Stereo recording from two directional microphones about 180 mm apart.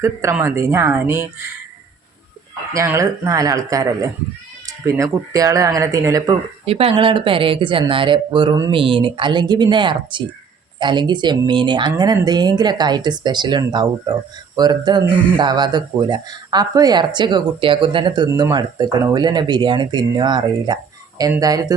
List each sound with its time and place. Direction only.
0.0 s a man's voice: 15° right (ahead or behind)
2.7 s a man's voice: 15° right (ahead or behind)
6.7 s speech: 30° right (ahead or behind)